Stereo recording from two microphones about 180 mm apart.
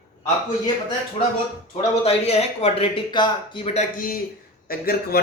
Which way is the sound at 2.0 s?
35° left (ahead or behind).